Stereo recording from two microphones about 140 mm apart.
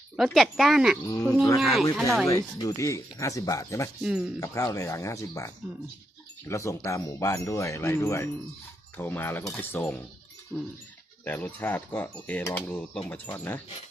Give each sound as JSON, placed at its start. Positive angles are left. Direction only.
{"t": 0.2, "sound": "speech", "side_deg": 0}
{"t": 2.2, "sound": "speech", "side_deg": 25}
{"t": 4.0, "sound": "speech", "side_deg": -5}
{"t": 4.4, "sound": "speech", "side_deg": 25}
{"t": 6.5, "sound": "speech", "side_deg": 20}
{"t": 10.5, "sound": "speech", "side_deg": -10}
{"t": 11.3, "sound": "speech", "side_deg": 15}